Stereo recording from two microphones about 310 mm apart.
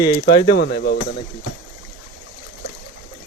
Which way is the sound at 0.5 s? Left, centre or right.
Left.